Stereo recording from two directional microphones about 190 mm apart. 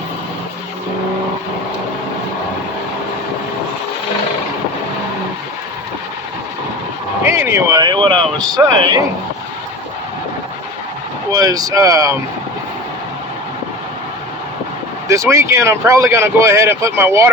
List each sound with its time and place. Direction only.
7.3 s speech: 15° right (ahead or behind)
11.3 s speech: 20° right (ahead or behind)
15.0 s speech: 15° right (ahead or behind)